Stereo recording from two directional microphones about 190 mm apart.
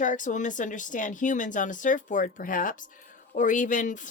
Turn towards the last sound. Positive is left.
turn(degrees=40)  # may be behind; listen again after turning